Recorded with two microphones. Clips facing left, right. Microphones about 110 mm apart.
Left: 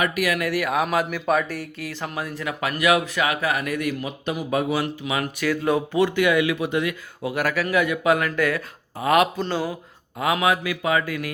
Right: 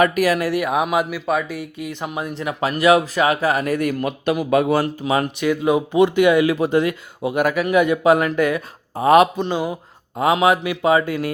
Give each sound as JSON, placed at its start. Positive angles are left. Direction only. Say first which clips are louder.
{"t": 0.0, "sound": "speech", "louder": "right 6 dB", "side_deg": -35}
{"t": 1.1, "sound": "speech", "louder": "right 1 dB", "side_deg": 0}
{"t": 1.8, "sound": "speech", "louder": "right 4 dB", "side_deg": -20}
{"t": 4.0, "sound": "speech", "louder": "right 7 dB", "side_deg": -65}
{"t": 4.8, "sound": "speech", "louder": "right 6 dB", "side_deg": -40}
{"t": 5.2, "sound": "speech", "louder": "right 4 dB", "side_deg": -20}
{"t": 7.3, "sound": "speech", "louder": "right 5 dB", "side_deg": -20}
{"t": 10.2, "sound": "speech", "louder": "right 5 dB", "side_deg": -30}